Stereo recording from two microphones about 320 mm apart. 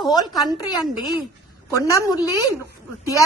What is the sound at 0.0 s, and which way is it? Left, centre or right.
A woman's voice, centre.